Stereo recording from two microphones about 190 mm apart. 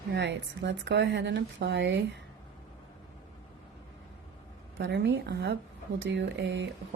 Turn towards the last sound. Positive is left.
turn(degrees=-65)  # may be behind; listen again after turning